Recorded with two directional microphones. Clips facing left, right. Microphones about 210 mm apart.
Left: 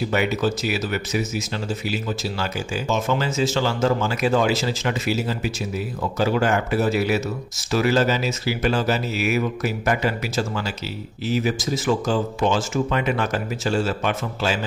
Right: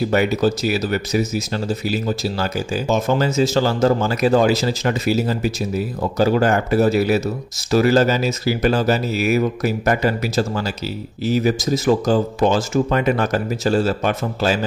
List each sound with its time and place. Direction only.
0.1 s speech: 40° right (ahead or behind)